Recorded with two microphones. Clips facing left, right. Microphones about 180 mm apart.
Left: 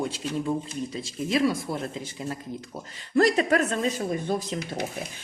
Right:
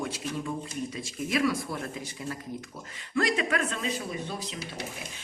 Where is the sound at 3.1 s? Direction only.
40° left (ahead or behind).